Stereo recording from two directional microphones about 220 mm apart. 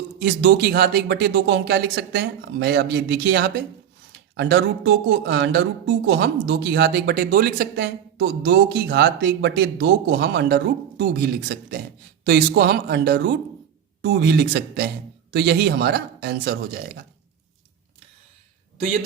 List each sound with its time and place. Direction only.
0.2 s speech: 45° right (ahead or behind)